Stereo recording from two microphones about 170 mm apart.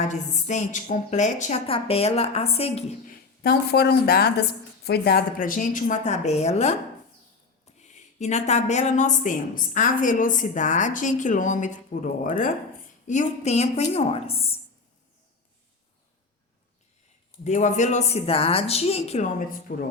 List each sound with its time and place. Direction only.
0.1 s a woman's voice: 45° left (ahead or behind)
3.1 s a woman's voice: 70° left (ahead or behind); by 6.7 s 40° left (ahead or behind)
7.8 s a woman's voice: 45° left (ahead or behind)
17.4 s a woman's voice: 45° left (ahead or behind)